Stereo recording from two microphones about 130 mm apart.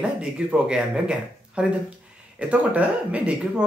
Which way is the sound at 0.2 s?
5° right (ahead or behind).